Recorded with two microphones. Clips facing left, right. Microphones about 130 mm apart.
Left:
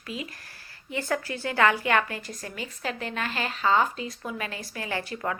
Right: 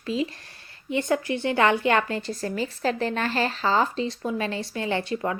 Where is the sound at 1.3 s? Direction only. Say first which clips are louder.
Even; 20° right (ahead or behind).